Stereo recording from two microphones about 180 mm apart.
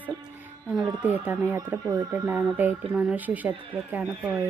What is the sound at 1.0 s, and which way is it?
Speech, 10° right (ahead or behind).